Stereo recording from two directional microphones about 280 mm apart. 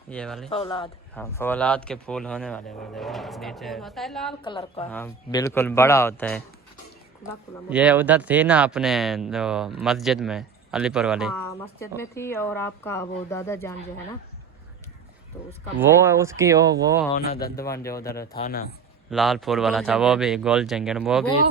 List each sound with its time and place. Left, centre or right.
0.1 s speech: centre
0.5 s speech: centre
4.4 s a woman's voice: centre
4.9 s speech: centre
7.7 s speech: centre
11.4 s speech: centre
15.8 s speech: centre
17.2 s speech: left
17.6 s speech: centre
18.4 s speech: left
19.1 s speech: centre